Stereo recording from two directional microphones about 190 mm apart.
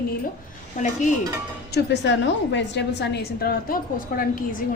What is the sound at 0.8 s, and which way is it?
Speech, 45° left (ahead or behind).